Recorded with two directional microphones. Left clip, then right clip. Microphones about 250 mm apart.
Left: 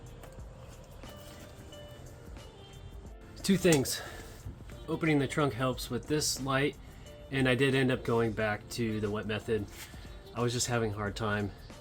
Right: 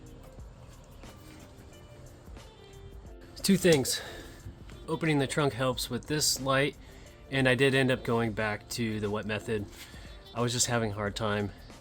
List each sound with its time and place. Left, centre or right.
3.3 s speech: right
4.9 s speech: right